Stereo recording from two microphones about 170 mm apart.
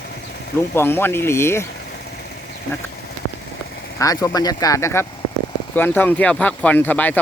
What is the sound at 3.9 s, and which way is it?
Speech, 20° left (ahead or behind).